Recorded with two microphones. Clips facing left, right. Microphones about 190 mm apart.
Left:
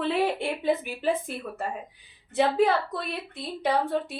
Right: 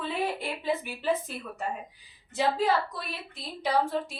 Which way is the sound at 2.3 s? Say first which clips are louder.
Left 4 dB; 60° left (ahead or behind).